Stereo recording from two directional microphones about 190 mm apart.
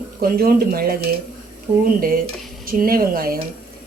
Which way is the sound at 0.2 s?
50° right (ahead or behind).